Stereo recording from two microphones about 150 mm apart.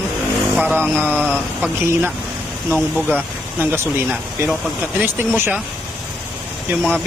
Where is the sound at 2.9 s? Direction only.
5° left (ahead or behind).